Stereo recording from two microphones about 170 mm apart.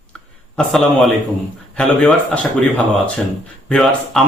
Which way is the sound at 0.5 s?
Centre (ahead or behind).